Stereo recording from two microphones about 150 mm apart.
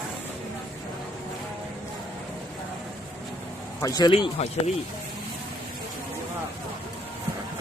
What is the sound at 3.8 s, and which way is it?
Speech, 30° left (ahead or behind).